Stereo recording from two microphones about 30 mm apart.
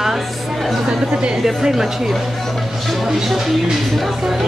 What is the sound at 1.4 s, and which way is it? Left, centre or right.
Speech, centre.